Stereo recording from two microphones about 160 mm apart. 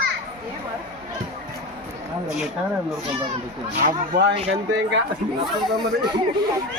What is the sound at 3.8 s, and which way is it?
Speech, 60° right (ahead or behind).